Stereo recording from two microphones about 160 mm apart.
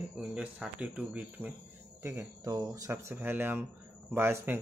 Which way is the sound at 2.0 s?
20° right (ahead or behind).